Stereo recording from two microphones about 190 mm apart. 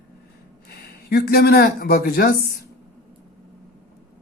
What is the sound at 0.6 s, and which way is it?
Speech, 55° left (ahead or behind).